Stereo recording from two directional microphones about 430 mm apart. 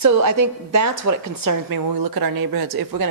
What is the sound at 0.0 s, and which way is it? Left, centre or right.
A woman's voice, right.